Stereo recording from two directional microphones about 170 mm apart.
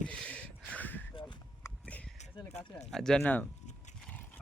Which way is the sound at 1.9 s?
10° left (ahead or behind).